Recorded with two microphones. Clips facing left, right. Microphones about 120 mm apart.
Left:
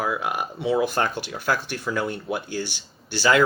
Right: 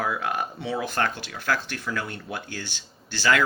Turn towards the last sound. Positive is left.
turn(degrees=20)  # may be behind; listen again after turning